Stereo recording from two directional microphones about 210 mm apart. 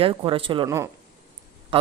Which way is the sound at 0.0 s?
25° right (ahead or behind).